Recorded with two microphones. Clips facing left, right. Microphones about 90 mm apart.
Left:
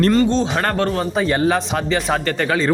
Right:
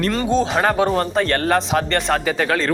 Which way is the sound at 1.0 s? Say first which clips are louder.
Even; 5° left (ahead or behind).